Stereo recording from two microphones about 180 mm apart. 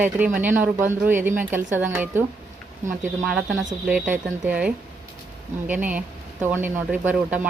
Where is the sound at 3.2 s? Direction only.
5° right (ahead or behind).